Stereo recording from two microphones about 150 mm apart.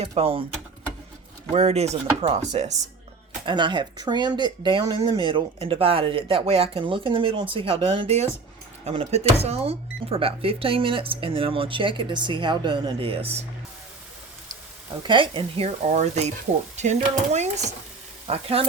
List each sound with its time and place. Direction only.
0.2 s speech: 40° right (ahead or behind)
1.5 s speech: 45° right (ahead or behind)
3.4 s speech: 30° right (ahead or behind)
15.0 s speech: 35° right (ahead or behind)
15.9 s speech: 50° right (ahead or behind)